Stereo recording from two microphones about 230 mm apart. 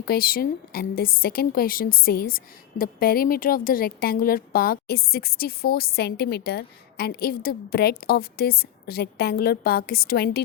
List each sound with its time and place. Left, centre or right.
0.0 s a woman's voice: left